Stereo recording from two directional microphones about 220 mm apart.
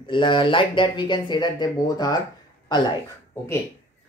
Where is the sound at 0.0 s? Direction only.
20° left (ahead or behind).